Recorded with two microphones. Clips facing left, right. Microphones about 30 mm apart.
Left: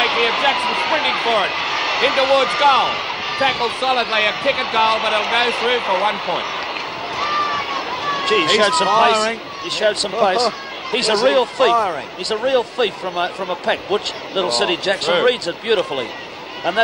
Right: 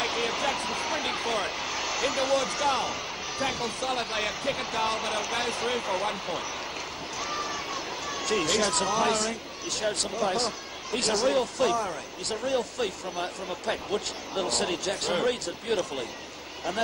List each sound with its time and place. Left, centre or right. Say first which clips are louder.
0.0 s speech: left 12 dB; left